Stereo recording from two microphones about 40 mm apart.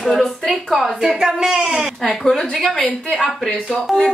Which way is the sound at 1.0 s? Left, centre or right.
Centre.